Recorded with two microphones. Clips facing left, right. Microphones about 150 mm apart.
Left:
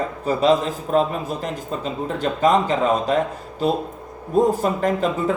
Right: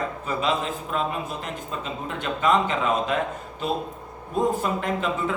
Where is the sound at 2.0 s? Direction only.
35° left (ahead or behind).